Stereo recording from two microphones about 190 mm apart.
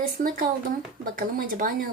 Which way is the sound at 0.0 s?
45° right (ahead or behind).